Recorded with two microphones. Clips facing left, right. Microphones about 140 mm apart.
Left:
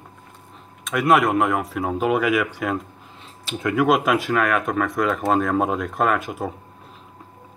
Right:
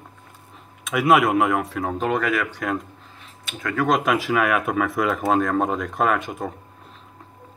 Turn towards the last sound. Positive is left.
turn(degrees=5)  # may be behind; listen again after turning